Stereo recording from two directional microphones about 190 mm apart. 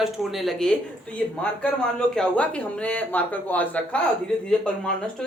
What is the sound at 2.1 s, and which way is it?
A woman's voice, 5° left (ahead or behind).